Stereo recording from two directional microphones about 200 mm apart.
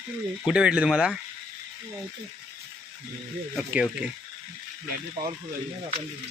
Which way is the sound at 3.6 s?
5° right (ahead or behind).